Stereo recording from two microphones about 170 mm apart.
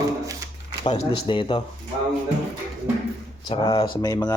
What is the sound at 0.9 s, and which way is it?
Speech, 30° left (ahead or behind).